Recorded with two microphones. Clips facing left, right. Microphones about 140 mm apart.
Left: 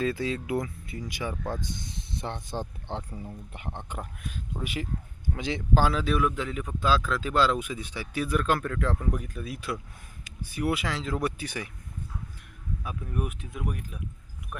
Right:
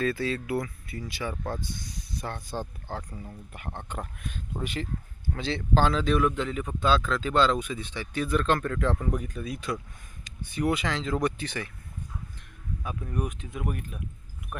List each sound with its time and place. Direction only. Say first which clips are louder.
0.0 s speech: even; 15° left (ahead or behind)
12.8 s speech: right 1 dB; 5° left (ahead or behind)